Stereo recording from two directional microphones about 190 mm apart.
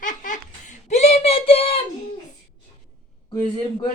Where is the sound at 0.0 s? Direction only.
40° left (ahead or behind).